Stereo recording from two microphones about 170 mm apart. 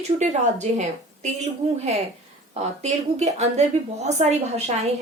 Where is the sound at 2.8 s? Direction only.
40° right (ahead or behind).